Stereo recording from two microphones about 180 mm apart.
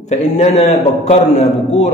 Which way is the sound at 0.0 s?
40° left (ahead or behind).